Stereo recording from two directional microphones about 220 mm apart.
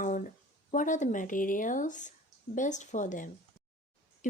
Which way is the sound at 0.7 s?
35° left (ahead or behind).